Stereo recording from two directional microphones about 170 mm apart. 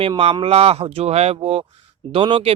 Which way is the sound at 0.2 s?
35° right (ahead or behind).